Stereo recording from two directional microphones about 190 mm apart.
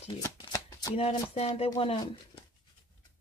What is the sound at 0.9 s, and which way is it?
Speech, 30° left (ahead or behind).